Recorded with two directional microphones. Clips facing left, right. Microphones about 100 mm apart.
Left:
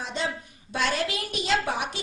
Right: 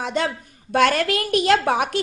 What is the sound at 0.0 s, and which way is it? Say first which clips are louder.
A woman's voice: right 7 dB; 60° right (ahead or behind).